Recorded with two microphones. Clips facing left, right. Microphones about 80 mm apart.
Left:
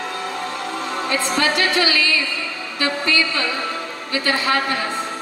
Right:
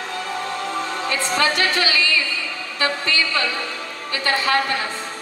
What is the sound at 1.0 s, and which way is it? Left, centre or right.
Speech, left.